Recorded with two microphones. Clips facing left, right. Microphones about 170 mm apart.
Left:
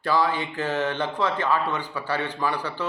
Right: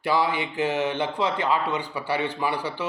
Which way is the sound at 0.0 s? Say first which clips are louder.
Even; 10° right (ahead or behind).